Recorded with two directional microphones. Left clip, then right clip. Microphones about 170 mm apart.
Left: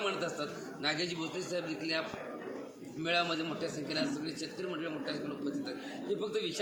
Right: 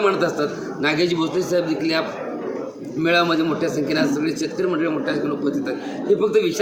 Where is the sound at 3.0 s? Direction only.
15° right (ahead or behind).